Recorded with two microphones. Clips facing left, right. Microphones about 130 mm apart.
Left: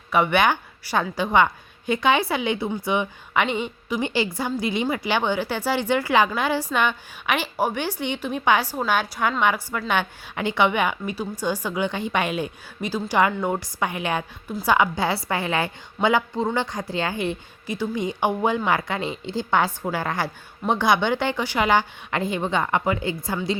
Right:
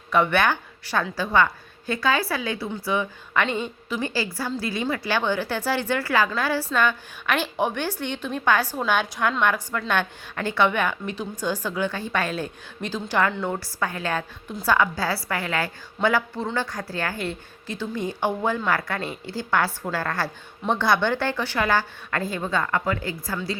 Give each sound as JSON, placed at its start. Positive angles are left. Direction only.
{"t": 0.1, "sound": "a woman's voice", "side_deg": 15}